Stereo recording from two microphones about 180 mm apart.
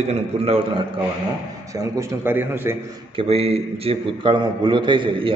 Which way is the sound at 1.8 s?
15° right (ahead or behind).